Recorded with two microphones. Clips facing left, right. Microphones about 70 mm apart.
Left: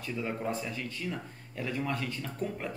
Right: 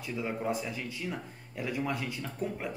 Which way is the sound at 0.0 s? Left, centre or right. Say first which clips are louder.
Even; centre.